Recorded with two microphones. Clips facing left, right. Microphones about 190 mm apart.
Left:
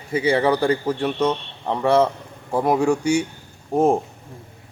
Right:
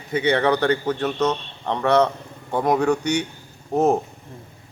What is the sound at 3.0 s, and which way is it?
Speech, 30° left (ahead or behind).